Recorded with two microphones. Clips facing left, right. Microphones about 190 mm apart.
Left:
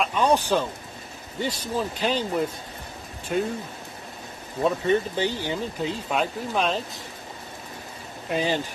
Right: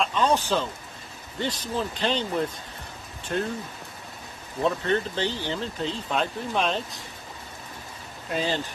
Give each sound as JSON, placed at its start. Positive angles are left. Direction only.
{"t": 0.0, "sound": "a sound", "side_deg": 15}
{"t": 1.4, "sound": "speech", "side_deg": 10}
{"t": 4.6, "sound": "speech", "side_deg": 10}
{"t": 8.3, "sound": "speech", "side_deg": 15}